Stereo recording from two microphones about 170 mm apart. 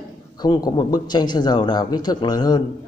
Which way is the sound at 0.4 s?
25° left (ahead or behind).